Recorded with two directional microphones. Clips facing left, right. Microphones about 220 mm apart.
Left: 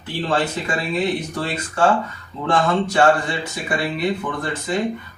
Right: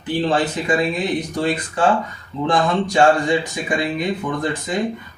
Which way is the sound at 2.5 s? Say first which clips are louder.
Even; 15° right (ahead or behind).